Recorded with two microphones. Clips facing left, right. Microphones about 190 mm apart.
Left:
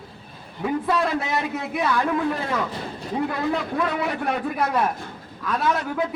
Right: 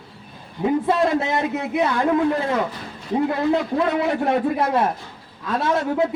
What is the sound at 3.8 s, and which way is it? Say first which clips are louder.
A man's voice: right 4 dB; 25° right (ahead or behind).